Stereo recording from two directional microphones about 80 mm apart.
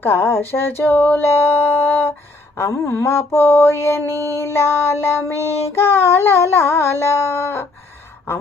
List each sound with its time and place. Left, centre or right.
0.0 s child singing: left